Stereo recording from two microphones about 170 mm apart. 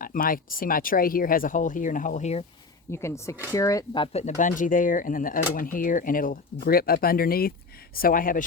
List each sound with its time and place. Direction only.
0.0 s speech: 55° left (ahead or behind)
2.9 s speech: 15° left (ahead or behind); by 8.4 s 55° left (ahead or behind)